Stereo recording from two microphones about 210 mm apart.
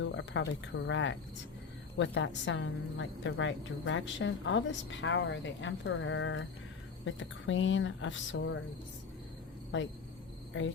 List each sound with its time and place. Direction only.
0.0 s a woman's voice: 60° left (ahead or behind)
9.7 s a woman's voice: 60° left (ahead or behind)